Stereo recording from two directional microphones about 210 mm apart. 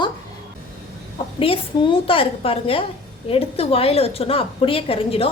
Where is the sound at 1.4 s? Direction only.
25° left (ahead or behind).